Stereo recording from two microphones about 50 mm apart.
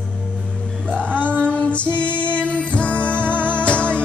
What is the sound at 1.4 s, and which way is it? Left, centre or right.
Female singing, left.